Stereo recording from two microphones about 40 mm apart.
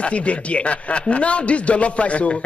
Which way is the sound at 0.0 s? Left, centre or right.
Left.